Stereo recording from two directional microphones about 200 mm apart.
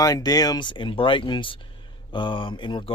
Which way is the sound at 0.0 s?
20° left (ahead or behind).